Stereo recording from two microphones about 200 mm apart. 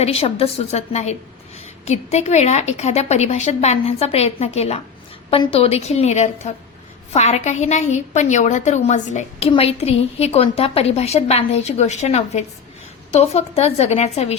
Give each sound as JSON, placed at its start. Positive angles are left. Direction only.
{"t": 0.0, "sound": "a woman's voice", "side_deg": 30}